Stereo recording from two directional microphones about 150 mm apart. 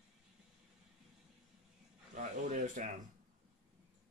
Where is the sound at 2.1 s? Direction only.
55° right (ahead or behind).